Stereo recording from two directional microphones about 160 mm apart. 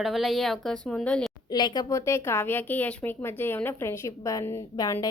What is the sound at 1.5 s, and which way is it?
A woman's voice, 25° left (ahead or behind).